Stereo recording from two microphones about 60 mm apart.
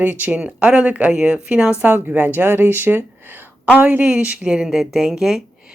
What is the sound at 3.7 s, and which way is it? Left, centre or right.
A woman's voice, right.